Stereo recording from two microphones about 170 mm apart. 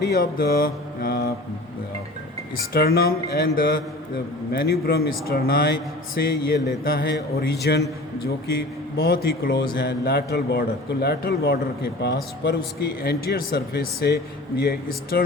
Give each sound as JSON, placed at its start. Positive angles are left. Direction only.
{"t": 0.0, "sound": "mantra", "side_deg": 65}
{"t": 2.7, "sound": "mantra", "side_deg": 65}
{"t": 4.5, "sound": "speech", "side_deg": 70}
{"t": 9.0, "sound": "speech", "side_deg": 65}
{"t": 12.0, "sound": "speech", "side_deg": 85}
{"t": 13.0, "sound": "speech", "side_deg": 65}